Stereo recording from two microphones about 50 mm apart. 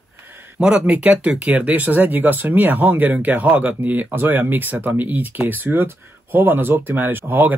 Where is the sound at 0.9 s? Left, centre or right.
Right.